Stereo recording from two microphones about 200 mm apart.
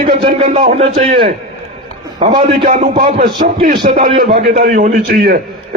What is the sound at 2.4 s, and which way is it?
Speech, 40° right (ahead or behind).